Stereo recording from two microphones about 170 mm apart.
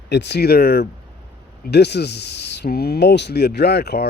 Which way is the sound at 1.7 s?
80° left.